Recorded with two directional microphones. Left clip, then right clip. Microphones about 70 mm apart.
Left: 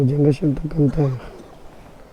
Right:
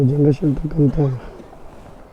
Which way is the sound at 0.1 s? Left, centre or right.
Left.